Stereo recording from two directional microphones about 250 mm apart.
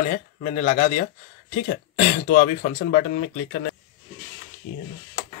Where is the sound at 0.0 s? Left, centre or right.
Left.